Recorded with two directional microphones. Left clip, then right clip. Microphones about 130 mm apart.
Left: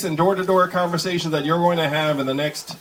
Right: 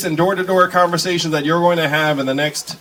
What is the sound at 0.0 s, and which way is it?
Speech, 55° right (ahead or behind).